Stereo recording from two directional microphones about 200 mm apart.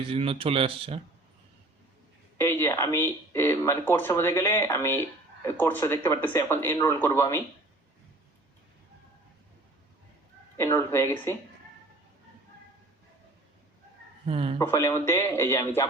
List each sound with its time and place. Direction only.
0.1 s speech: 30° right (ahead or behind)
2.4 s speech: 10° left (ahead or behind)
10.6 s speech: 15° left (ahead or behind)
14.3 s speech: 30° right (ahead or behind)
14.6 s speech: 15° left (ahead or behind)